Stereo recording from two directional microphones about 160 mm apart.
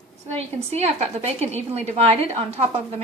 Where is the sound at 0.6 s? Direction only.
45° right (ahead or behind).